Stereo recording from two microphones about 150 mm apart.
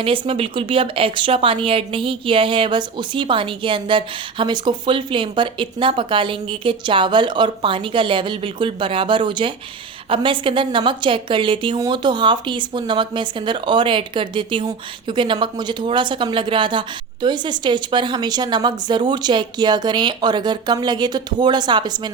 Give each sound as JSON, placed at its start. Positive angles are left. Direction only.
{"t": 0.0, "sound": "a woman's voice", "side_deg": -35}